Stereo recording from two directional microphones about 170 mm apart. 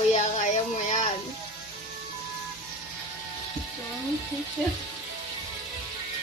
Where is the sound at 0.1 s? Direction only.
40° left (ahead or behind).